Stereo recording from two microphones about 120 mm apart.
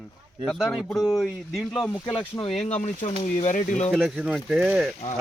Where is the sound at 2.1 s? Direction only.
50° left (ahead or behind).